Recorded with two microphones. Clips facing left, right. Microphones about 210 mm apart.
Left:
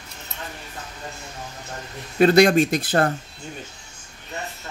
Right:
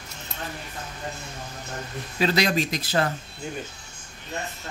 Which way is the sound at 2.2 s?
55° left (ahead or behind).